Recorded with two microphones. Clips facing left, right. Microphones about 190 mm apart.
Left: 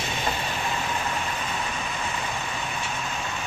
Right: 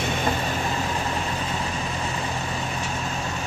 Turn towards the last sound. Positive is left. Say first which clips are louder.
# right 3 dB
turn(degrees=-35)  # may be behind; listen again after turning